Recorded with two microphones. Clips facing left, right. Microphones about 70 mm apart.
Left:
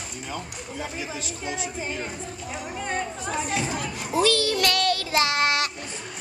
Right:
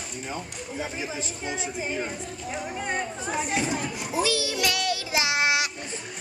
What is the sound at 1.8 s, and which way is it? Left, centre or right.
Speech, centre.